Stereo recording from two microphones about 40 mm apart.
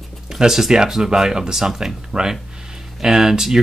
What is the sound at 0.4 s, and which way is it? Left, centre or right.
Speech, centre.